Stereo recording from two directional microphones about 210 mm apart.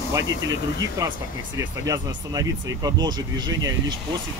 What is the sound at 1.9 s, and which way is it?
Speech, 15° right (ahead or behind).